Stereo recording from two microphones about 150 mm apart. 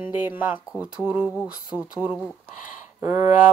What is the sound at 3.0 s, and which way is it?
Speech, 20° right (ahead or behind).